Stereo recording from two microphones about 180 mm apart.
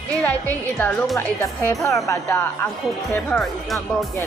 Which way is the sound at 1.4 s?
15° left (ahead or behind).